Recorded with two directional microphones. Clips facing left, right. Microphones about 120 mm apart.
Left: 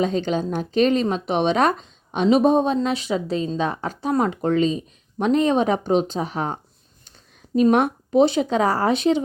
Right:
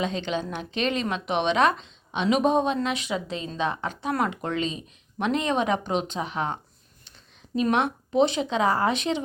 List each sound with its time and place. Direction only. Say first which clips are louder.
0.0 s speech: left 6 dB; 40° left (ahead or behind)